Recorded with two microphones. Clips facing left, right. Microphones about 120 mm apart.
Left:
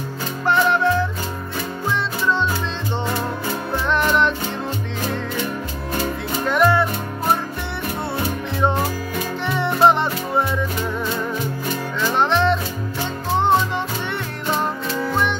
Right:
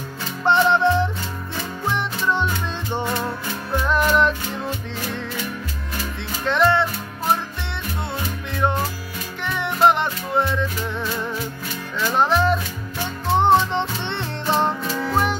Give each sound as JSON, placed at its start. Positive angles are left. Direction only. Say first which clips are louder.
{"t": 0.5, "sound": "music", "louder": "right 1 dB", "side_deg": -20}
{"t": 3.9, "sound": "music", "louder": "even", "side_deg": 0}
{"t": 6.4, "sound": "music", "louder": "left 1 dB", "side_deg": 5}
{"t": 9.5, "sound": "music", "louder": "left 2 dB", "side_deg": 15}
{"t": 12.2, "sound": "music", "louder": "even", "side_deg": -5}
{"t": 13.4, "sound": "music", "louder": "right 1 dB", "side_deg": -20}